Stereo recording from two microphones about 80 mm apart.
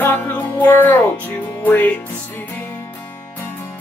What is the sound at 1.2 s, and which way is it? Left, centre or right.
Speech, left.